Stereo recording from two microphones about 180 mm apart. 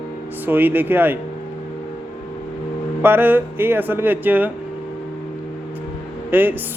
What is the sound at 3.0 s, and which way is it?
Speech, 10° right (ahead or behind).